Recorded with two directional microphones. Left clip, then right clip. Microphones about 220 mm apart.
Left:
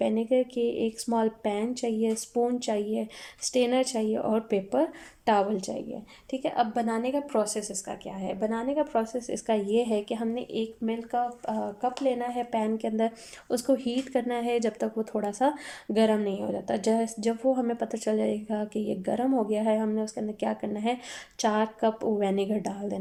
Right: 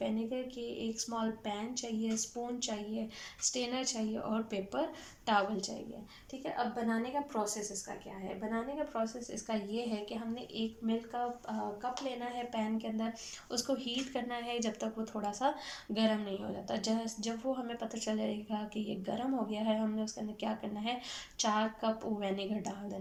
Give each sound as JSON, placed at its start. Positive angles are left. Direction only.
{"t": 0.0, "sound": "a woman's voice", "side_deg": 40}